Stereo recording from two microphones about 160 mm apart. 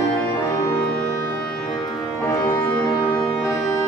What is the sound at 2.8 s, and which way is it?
Music, 15° left (ahead or behind).